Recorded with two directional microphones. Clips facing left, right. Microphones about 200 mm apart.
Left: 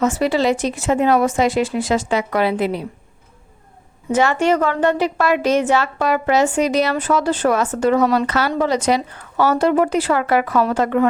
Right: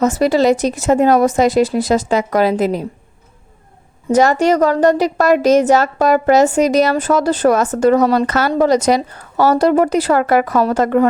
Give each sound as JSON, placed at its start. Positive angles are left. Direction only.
{"t": 0.0, "sound": "a woman's voice", "side_deg": -40}
{"t": 4.1, "sound": "a woman's voice", "side_deg": -40}